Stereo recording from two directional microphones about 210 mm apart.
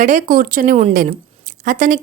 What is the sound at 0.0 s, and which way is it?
A woman's voice, 40° right (ahead or behind).